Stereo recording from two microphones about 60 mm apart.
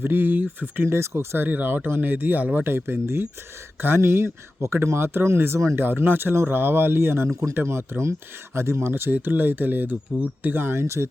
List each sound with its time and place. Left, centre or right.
0.0 s speech: right
0.9 s speech: right
1.5 s speech: right
2.6 s speech: right
10.1 s speech: right
10.5 s speech: right